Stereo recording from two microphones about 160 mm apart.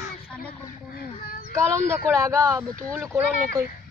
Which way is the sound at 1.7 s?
15° right (ahead or behind).